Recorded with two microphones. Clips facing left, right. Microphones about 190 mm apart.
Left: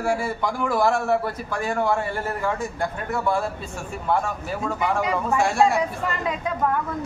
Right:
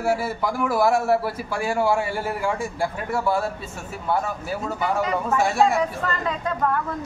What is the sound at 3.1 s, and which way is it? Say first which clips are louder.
Speech: even; 5° right (ahead or behind).